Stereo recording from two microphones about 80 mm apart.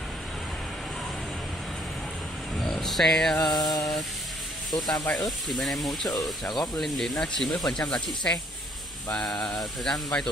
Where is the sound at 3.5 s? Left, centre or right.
Left.